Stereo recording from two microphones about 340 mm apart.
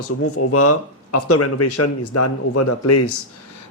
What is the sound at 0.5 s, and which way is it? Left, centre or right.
Speech, left.